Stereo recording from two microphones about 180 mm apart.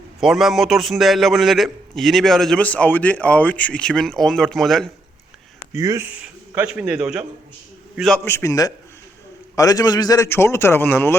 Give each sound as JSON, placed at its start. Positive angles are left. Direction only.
{"t": 0.2, "sound": "a man's voice", "side_deg": 0}
{"t": 5.7, "sound": "a man's voice", "side_deg": -15}
{"t": 8.2, "sound": "a man's voice", "side_deg": 15}